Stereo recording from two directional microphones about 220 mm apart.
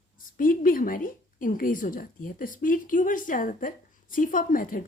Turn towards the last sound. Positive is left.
turn(degrees=40)  # may be behind; listen again after turning